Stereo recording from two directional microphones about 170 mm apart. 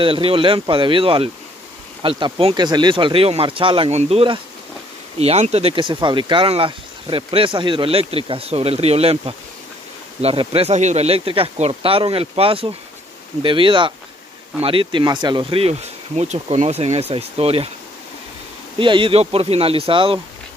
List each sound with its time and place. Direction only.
0.0 s speech: 30° right (ahead or behind)
18.8 s speech: 30° right (ahead or behind)